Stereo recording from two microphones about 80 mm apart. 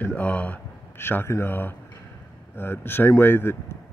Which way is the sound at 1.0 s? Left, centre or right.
Left.